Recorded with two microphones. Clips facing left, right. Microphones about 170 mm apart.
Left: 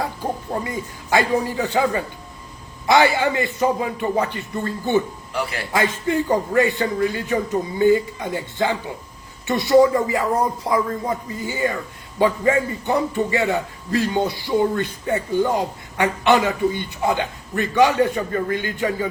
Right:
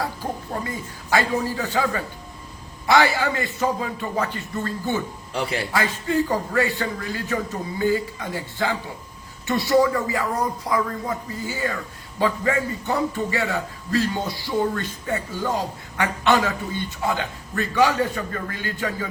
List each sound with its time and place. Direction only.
0.0 s a man's voice: 20° left (ahead or behind)
5.3 s a man's voice: 25° right (ahead or behind)
5.7 s a man's voice: 20° left (ahead or behind)